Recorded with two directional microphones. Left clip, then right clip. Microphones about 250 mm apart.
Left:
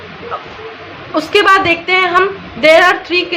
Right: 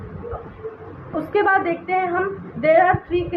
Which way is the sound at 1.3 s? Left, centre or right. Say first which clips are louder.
Left 9 dB; left.